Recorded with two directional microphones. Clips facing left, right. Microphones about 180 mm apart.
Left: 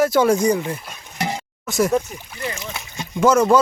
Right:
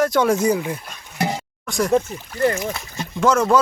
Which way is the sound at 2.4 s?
55° right (ahead or behind).